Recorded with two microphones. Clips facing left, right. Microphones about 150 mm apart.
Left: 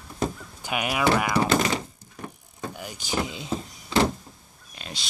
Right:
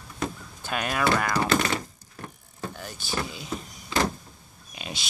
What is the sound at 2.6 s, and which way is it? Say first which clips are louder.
Vehicle: left 1 dB; 15° left (ahead or behind).